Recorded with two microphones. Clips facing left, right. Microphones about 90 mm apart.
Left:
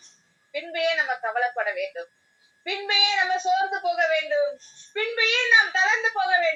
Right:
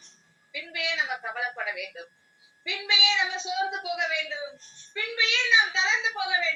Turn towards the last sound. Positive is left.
turn(degrees=50)  # may be behind; listen again after turning